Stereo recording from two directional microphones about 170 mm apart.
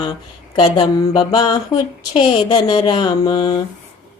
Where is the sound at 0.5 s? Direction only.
25° left (ahead or behind).